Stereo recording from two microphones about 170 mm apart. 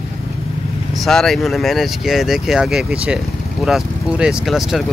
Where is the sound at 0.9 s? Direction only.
Centre (ahead or behind).